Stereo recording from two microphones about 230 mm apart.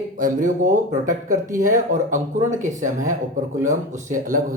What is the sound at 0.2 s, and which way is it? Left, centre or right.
Speech, right.